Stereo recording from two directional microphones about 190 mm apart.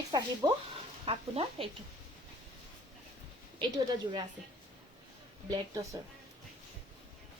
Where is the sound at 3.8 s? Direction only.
20° right (ahead or behind).